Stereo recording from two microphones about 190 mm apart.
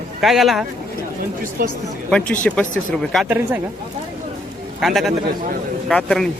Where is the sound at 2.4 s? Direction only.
5° left (ahead or behind).